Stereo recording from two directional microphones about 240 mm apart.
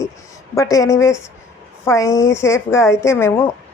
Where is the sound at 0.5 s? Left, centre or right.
Centre.